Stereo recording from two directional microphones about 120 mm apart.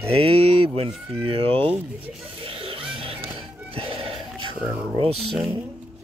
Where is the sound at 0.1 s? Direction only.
55° right (ahead or behind).